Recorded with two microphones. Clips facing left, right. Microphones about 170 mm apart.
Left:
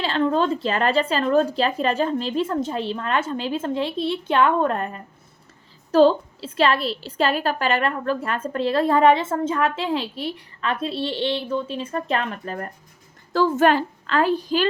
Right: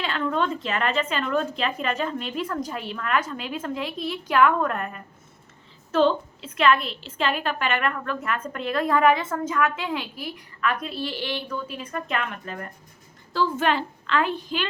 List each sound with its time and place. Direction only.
0.0 s a woman's voice: 30° left (ahead or behind)